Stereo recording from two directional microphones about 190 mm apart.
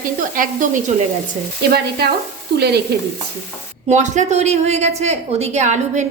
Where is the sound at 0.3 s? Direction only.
45° right (ahead or behind).